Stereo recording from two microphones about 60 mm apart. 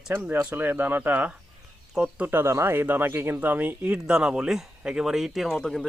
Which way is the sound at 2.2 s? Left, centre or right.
Right.